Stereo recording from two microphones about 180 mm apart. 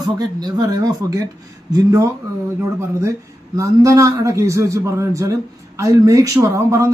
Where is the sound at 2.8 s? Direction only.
15° right (ahead or behind).